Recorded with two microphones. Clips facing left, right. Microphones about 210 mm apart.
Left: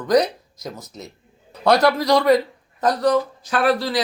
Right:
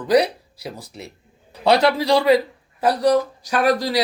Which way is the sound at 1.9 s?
10° right (ahead or behind).